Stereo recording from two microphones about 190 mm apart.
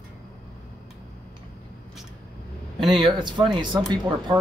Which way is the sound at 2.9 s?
25° right (ahead or behind).